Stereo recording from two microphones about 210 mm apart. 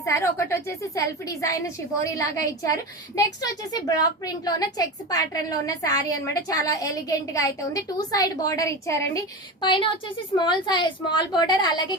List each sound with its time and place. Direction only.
0.0 s a woman's voice: 15° left (ahead or behind)